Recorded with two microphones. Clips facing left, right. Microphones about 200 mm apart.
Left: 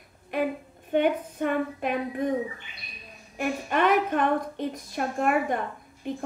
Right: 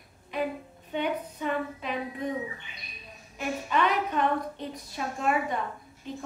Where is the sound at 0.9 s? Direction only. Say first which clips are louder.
Left 7 dB; 55° left (ahead or behind).